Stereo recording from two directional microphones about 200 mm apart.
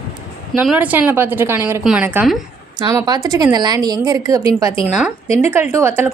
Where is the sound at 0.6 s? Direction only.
5° right (ahead or behind).